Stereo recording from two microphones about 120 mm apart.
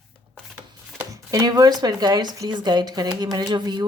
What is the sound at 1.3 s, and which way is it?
A woman's voice, 30° right (ahead or behind).